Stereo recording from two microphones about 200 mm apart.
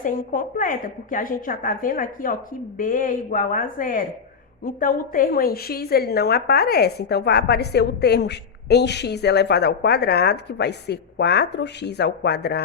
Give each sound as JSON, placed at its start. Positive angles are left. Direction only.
{"t": 0.0, "sound": "a woman's voice", "side_deg": 45}